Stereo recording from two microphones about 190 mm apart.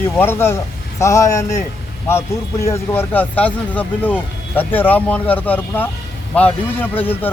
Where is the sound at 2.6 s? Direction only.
15° left (ahead or behind).